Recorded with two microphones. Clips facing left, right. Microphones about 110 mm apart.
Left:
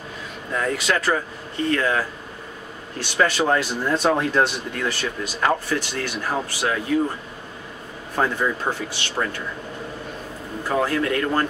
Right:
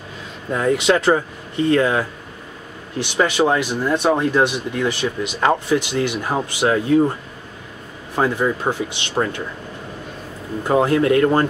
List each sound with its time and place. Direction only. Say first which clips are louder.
0.5 s speech: right 6 dB; 25° right (ahead or behind)
8.2 s speech: right 3 dB; 15° right (ahead or behind)
10.6 s speech: right 6 dB; 25° right (ahead or behind)